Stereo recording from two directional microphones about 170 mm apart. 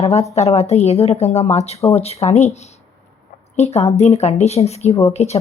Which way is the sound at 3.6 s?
40° left (ahead or behind).